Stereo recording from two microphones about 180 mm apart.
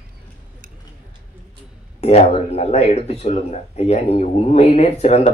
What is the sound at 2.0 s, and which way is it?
Speech, 35° left (ahead or behind).